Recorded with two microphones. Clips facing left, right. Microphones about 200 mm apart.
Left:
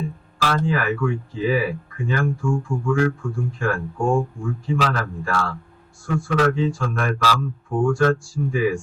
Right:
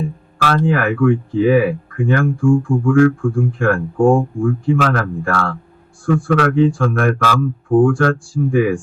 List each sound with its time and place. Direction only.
0.4 s speech: 55° right (ahead or behind)